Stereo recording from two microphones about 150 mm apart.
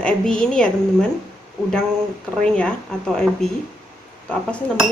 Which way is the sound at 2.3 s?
5° left (ahead or behind).